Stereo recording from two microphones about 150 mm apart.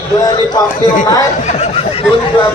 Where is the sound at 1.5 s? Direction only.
45° left (ahead or behind).